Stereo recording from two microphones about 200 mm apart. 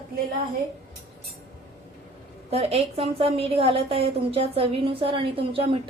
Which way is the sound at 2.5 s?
30° right (ahead or behind).